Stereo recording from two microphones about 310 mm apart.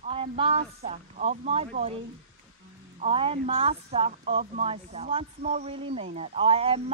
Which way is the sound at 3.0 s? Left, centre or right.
Centre.